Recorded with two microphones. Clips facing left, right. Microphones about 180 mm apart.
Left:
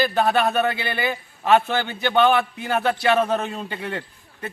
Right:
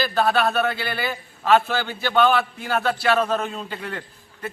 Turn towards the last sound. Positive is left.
turn(degrees=20)  # may be behind; listen again after turning